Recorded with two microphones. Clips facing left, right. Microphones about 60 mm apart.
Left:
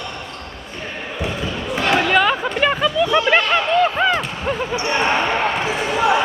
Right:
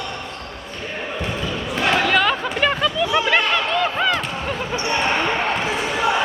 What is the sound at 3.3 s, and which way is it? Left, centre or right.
Basketball bounce, centre.